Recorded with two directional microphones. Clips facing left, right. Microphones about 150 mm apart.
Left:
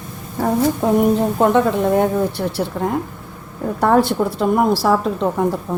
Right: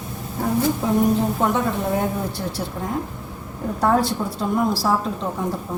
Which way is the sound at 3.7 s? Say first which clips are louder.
Left 5 dB; 65° left (ahead or behind).